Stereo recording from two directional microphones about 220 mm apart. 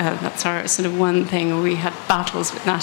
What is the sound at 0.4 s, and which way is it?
Speech, 15° left (ahead or behind).